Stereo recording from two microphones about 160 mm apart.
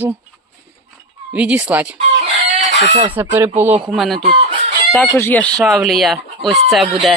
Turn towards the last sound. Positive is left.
turn(degrees=0)  # may be behind; listen again after turning